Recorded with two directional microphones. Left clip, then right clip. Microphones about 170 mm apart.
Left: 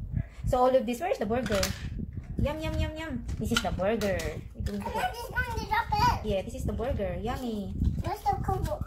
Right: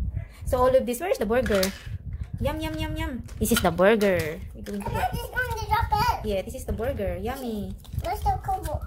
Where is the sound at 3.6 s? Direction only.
80° right.